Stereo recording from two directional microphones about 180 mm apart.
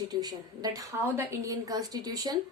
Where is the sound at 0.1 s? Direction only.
20° right (ahead or behind).